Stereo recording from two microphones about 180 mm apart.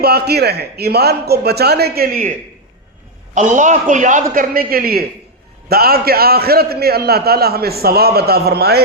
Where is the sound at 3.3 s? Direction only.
45° right (ahead or behind).